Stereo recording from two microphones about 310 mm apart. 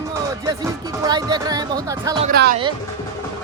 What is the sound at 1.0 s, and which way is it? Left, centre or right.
Speech, centre.